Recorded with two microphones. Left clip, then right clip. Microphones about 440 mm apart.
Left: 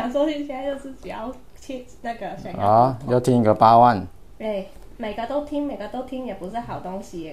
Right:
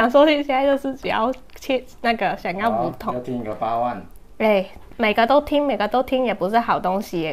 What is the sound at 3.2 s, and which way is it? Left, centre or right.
Speech, left.